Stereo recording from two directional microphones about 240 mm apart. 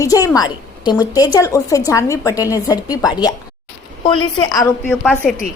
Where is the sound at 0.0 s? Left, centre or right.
Centre.